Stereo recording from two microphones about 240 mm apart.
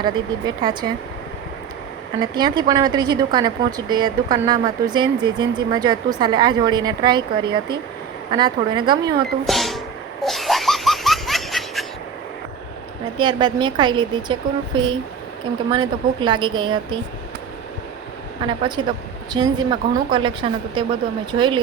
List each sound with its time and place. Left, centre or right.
0.0 s speech: centre
2.2 s a woman's voice: centre
9.5 s speech: centre
10.2 s laughter: centre
13.1 s a woman's voice: centre
18.4 s a woman's voice: centre